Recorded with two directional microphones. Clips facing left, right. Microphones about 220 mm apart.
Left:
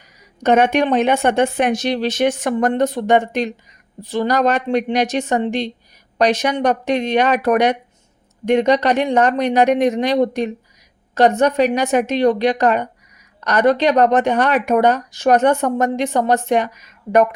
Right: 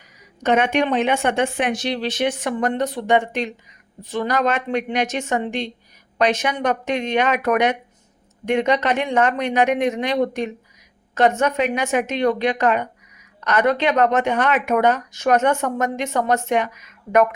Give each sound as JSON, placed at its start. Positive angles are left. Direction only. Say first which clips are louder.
{"t": 0.4, "sound": "speech", "louder": "left 4 dB", "side_deg": 40}